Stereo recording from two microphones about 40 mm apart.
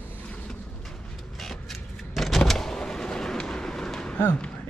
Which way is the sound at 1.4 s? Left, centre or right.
Centre.